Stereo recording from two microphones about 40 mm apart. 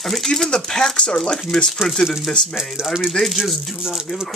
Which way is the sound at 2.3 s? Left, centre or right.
Centre.